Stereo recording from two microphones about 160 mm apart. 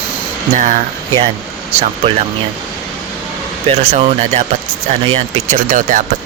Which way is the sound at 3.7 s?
40° right (ahead or behind).